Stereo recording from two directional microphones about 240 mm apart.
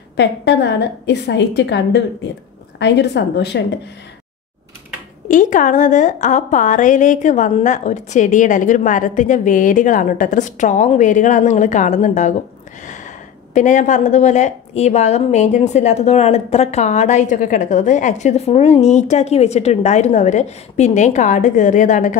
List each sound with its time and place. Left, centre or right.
0.2 s a woman's voice: left
5.3 s a woman's voice: left